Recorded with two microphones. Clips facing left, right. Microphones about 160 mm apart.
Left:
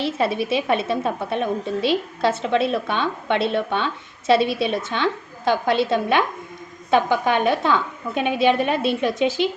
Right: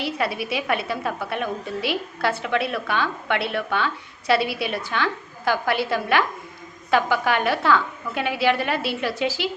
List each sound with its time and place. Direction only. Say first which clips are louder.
0.0 s a woman's voice: left 4 dB; 25° left (ahead or behind)